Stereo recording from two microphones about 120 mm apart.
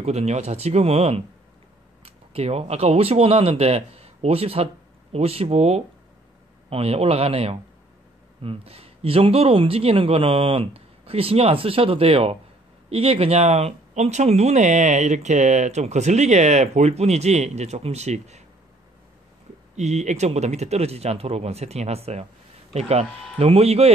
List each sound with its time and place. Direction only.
0.0 s speech: 65° right (ahead or behind)
19.7 s speech: 70° right (ahead or behind)